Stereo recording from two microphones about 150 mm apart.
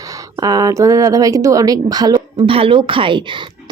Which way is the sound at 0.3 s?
25° right (ahead or behind).